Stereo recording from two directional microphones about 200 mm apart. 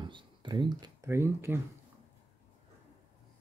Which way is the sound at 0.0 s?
20° right (ahead or behind).